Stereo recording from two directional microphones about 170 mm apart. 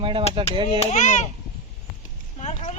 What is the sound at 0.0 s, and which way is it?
Chop, 30° right (ahead or behind).